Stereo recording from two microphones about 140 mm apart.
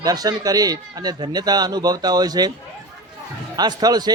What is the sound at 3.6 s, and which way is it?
Speech, 30° right (ahead or behind).